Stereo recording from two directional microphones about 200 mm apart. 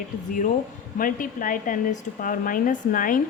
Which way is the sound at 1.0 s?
45° left (ahead or behind).